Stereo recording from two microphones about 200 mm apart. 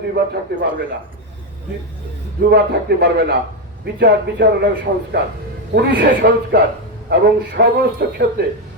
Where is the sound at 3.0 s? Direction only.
55° right (ahead or behind).